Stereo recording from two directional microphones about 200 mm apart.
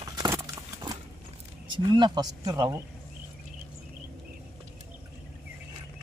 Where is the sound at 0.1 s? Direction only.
15° right (ahead or behind).